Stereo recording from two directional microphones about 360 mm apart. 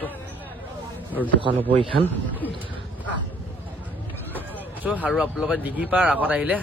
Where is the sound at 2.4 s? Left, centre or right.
Centre.